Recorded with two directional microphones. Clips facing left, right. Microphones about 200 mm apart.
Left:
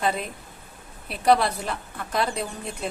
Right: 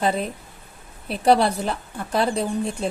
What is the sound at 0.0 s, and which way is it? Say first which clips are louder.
A woman's voice: right 4 dB; 30° right (ahead or behind).